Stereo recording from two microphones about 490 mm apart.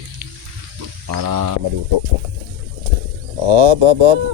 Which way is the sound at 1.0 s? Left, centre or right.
Right.